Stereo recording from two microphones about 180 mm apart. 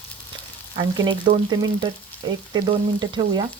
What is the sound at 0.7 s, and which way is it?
Frying, 25° right (ahead or behind).